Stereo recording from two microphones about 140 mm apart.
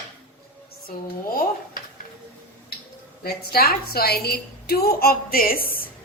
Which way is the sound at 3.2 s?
90° left.